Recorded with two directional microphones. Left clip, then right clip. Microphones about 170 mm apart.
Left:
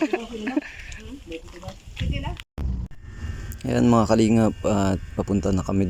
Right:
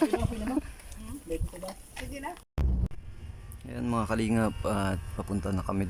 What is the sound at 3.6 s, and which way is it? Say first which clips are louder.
Speech: left 13 dB; 30° left (ahead or behind).